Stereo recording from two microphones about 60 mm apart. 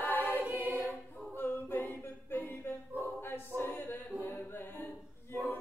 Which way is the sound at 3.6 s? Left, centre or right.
Left.